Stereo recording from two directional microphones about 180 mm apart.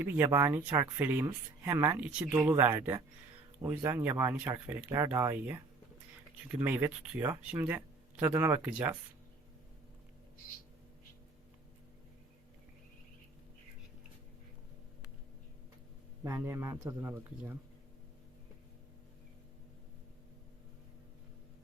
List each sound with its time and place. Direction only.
0.0 s speech: 10° right (ahead or behind)
16.2 s speech: 15° right (ahead or behind)